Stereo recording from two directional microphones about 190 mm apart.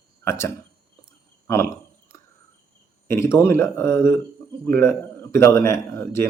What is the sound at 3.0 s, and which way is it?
A man's voice, 15° left (ahead or behind).